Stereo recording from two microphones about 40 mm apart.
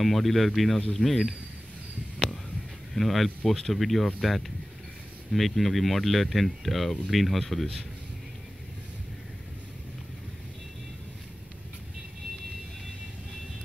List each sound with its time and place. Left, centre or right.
0.0 s speech: centre
2.9 s speech: centre